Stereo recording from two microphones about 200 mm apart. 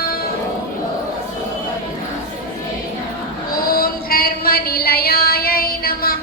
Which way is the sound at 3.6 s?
45° left (ahead or behind).